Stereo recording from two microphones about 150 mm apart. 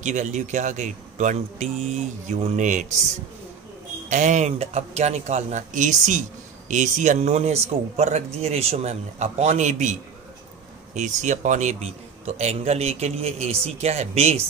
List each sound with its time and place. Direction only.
0.0 s a man's voice: 55° right (ahead or behind)
4.1 s a man's voice: 55° right (ahead or behind)
11.0 s a man's voice: 55° right (ahead or behind)